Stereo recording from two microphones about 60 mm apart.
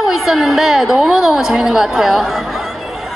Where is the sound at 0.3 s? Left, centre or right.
Centre.